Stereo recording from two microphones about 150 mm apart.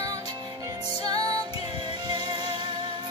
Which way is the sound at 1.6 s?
30° right (ahead or behind).